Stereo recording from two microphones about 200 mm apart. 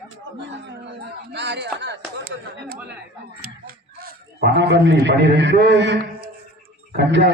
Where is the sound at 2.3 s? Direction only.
65° right (ahead or behind).